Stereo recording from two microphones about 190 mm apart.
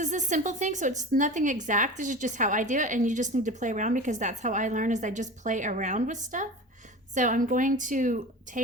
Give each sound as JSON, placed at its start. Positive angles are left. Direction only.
{"t": 0.0, "sound": "a woman's voice", "side_deg": -40}